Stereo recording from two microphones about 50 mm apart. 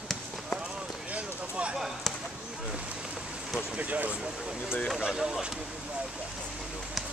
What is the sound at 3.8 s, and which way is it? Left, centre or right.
Speech, right.